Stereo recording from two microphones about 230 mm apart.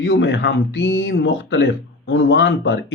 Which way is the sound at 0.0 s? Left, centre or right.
Left.